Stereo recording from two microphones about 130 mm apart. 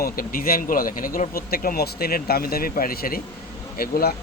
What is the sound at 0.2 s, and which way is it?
Speech, 90° left.